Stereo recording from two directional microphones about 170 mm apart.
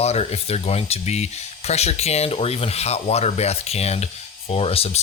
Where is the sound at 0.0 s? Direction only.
40° left (ahead or behind).